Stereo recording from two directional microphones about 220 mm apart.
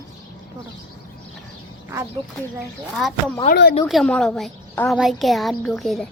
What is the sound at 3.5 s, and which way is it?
Speech, 50° left (ahead or behind).